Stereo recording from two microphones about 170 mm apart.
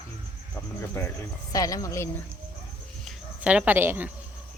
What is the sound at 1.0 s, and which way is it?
Speech, 15° left (ahead or behind).